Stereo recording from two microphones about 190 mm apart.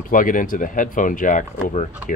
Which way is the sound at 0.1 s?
45° left (ahead or behind).